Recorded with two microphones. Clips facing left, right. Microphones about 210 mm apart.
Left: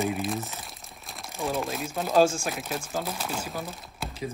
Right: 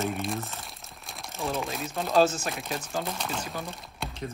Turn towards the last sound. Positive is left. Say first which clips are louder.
# left 1 dB
turn(degrees=0)  # may be behind; listen again after turning